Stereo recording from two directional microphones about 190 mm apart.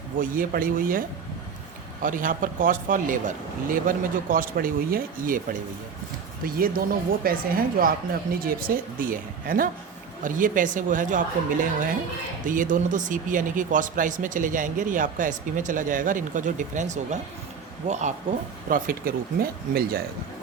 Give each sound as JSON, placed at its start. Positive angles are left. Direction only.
{"t": 0.2, "sound": "speech", "side_deg": -45}
{"t": 18.7, "sound": "speech", "side_deg": -50}